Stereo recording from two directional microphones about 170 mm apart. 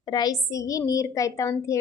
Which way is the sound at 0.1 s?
25° left (ahead or behind).